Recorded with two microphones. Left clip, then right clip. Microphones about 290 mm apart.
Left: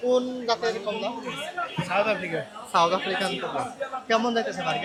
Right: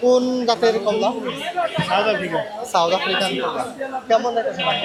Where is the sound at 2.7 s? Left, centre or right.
Left.